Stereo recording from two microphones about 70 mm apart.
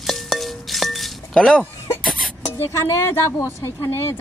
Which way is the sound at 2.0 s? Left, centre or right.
Centre.